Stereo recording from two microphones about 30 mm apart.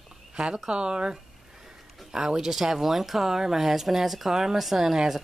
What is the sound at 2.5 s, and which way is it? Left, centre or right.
Speech, centre.